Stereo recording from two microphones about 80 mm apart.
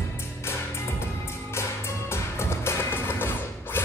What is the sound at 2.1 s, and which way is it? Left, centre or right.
Music, left.